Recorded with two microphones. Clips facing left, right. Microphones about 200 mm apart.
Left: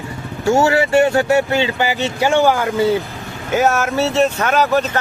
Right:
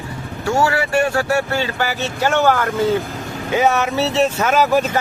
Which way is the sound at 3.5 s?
Centre (ahead or behind).